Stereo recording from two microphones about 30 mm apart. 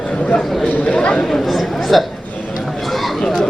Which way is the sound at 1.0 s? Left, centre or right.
Left.